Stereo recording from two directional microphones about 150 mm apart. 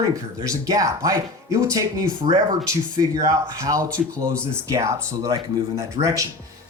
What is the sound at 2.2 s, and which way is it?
Speech, 60° right (ahead or behind).